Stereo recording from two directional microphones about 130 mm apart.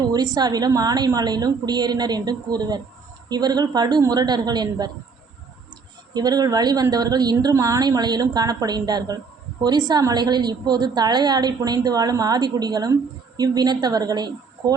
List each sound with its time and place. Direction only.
0.1 s a woman's voice: 30° right (ahead or behind)
6.1 s a woman's voice: 30° right (ahead or behind)